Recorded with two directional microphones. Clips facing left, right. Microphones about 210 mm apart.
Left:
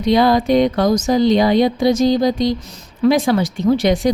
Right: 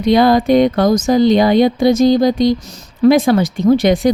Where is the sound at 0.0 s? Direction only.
55° right (ahead or behind).